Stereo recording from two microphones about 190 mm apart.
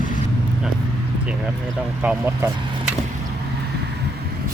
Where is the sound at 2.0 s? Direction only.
10° right (ahead or behind).